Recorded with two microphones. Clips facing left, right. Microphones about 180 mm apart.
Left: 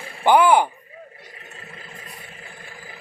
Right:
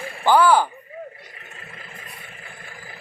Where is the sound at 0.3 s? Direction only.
20° left (ahead or behind).